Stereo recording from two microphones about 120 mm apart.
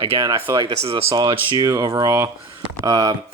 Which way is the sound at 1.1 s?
40° right (ahead or behind).